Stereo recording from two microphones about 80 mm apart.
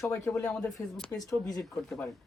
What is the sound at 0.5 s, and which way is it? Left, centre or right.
Speech, centre.